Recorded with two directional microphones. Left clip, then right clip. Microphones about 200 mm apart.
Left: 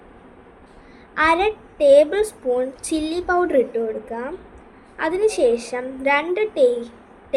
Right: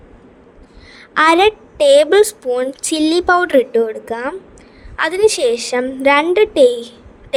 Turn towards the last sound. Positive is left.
turn(degrees=-45)  # may be behind; listen again after turning